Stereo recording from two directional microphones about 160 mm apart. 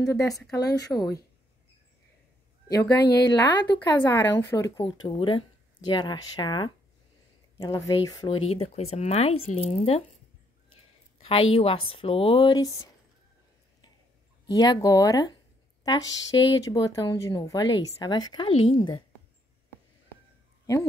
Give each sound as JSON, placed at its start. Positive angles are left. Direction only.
{"t": 0.0, "sound": "speech", "side_deg": 20}
{"t": 2.7, "sound": "speech", "side_deg": 25}
{"t": 4.1, "sound": "speech", "side_deg": 15}
{"t": 8.3, "sound": "speech", "side_deg": 40}
{"t": 11.2, "sound": "speech", "side_deg": 35}
{"t": 14.5, "sound": "speech", "side_deg": 25}